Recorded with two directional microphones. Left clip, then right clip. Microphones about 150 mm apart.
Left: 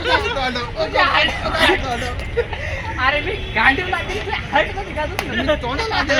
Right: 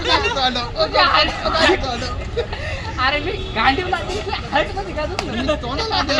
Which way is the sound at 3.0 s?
10° right (ahead or behind).